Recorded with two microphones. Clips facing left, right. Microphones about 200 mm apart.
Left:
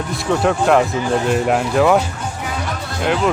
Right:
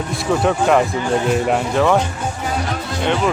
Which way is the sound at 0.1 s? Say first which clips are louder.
Even; centre (ahead or behind).